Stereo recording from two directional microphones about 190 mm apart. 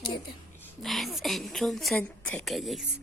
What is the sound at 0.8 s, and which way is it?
A woman's voice, centre (ahead or behind).